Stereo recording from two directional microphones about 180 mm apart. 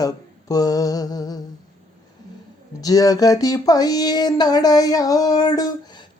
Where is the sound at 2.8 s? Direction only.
20° left (ahead or behind).